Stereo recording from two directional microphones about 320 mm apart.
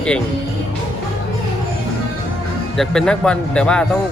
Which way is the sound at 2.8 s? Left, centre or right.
Centre.